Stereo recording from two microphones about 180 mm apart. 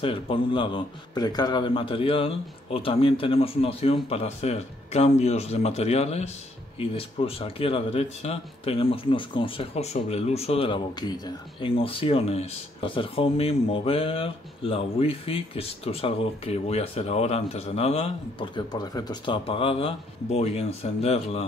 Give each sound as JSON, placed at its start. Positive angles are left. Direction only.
{"t": 0.0, "sound": "speech", "side_deg": 30}